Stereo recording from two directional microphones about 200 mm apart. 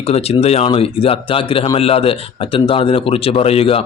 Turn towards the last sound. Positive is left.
turn(degrees=30)  # may be behind; listen again after turning